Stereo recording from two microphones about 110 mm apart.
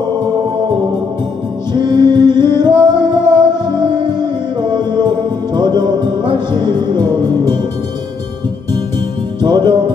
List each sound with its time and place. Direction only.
1.7 s music: 40° right (ahead or behind)
9.4 s music: 45° right (ahead or behind)